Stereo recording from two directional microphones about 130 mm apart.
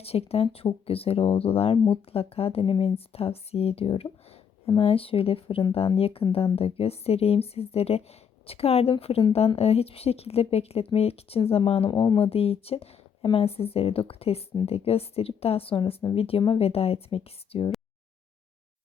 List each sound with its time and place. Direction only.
0.0 s speech: 50° left (ahead or behind)
11.9 s speech: 30° left (ahead or behind)
12.2 s speech: 50° left (ahead or behind)